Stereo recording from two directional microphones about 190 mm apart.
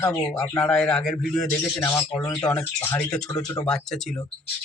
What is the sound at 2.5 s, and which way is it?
Speech, 5° left (ahead or behind).